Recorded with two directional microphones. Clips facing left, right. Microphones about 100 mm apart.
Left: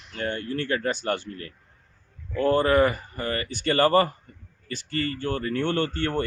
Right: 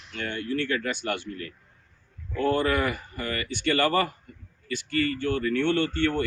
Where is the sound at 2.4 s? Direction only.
40° left (ahead or behind).